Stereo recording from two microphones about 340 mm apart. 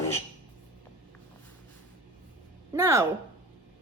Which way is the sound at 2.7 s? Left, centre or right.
Centre.